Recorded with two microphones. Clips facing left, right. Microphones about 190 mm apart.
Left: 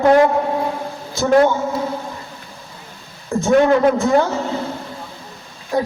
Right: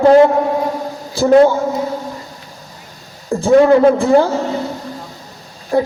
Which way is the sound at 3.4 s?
30° right (ahead or behind).